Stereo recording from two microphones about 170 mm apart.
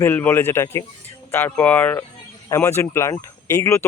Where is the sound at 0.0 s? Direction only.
10° left (ahead or behind).